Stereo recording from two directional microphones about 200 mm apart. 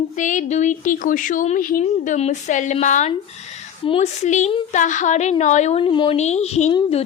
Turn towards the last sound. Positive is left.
turn(degrees=35)  # may be behind; listen again after turning